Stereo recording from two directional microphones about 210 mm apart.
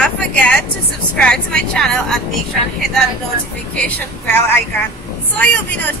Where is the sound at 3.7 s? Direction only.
10° left (ahead or behind).